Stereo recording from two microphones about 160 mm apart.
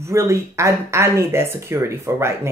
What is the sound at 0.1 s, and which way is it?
Speech, 20° right (ahead or behind).